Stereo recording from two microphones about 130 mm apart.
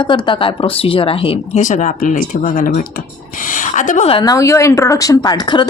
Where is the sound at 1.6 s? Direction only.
70° left (ahead or behind); by 2.8 s 90° left.